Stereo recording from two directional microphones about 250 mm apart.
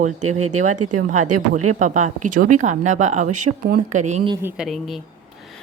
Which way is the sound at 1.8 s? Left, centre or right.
Right.